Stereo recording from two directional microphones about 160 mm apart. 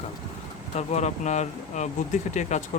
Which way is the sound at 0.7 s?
45° left (ahead or behind).